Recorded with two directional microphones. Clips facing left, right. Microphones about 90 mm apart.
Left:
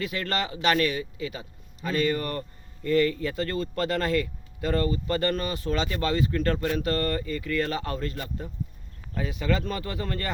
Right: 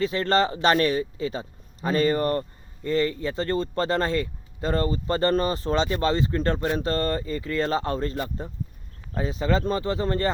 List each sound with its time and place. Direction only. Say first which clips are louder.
0.0 s a man's voice: right 7 dB; 30° right (ahead or behind)